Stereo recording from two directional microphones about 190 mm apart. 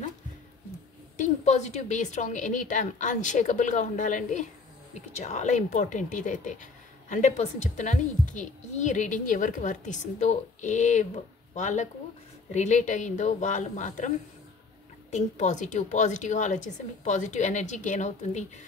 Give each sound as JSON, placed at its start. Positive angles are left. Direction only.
{"t": 1.1, "sound": "speech", "side_deg": 40}